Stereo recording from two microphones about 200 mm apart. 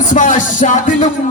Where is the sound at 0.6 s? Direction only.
40° left (ahead or behind).